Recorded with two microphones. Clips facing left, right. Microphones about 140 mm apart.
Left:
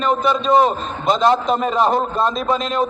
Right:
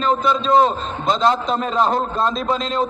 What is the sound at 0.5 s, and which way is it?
A man's voice, 10° left (ahead or behind).